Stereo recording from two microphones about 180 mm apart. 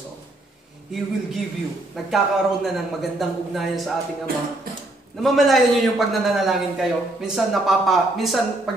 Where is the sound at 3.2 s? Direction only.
Centre (ahead or behind).